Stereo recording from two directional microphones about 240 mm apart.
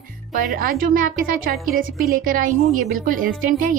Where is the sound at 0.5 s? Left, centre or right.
Right.